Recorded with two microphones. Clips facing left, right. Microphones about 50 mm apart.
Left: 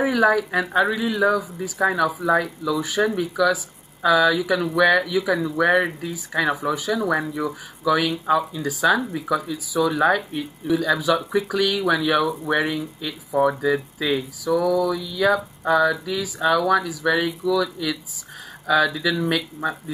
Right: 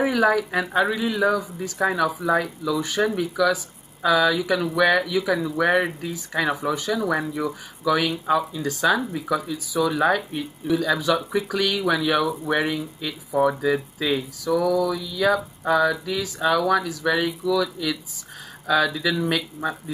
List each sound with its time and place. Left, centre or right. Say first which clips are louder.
0.0 s speech: left 1 dB; centre